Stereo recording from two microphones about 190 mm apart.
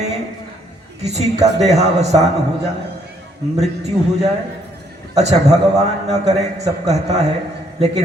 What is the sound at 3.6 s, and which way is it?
A man's voice, 35° right (ahead or behind).